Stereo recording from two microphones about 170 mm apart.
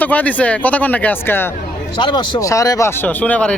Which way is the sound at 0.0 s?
10° left (ahead or behind).